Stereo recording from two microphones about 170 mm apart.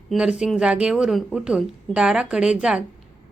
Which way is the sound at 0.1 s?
5° right (ahead or behind).